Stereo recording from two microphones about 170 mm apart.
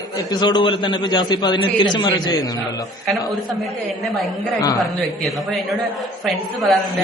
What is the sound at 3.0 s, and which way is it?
Speech, centre (ahead or behind).